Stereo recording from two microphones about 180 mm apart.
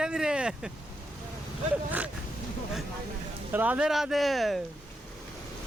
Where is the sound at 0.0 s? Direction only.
5° right (ahead or behind).